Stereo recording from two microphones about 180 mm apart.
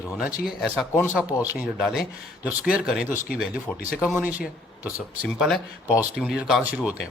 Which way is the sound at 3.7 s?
10° left (ahead or behind).